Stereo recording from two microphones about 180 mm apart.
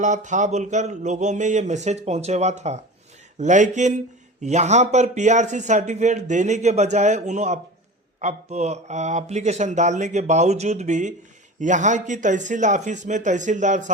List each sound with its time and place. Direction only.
0.0 s speech: 45° right (ahead or behind)